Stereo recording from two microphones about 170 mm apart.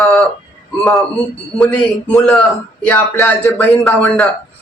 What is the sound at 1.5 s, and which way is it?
A man's voice, centre (ahead or behind).